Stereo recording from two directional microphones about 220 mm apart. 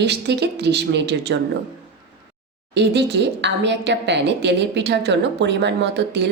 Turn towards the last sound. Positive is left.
turn(degrees=-50)  # may be behind; listen again after turning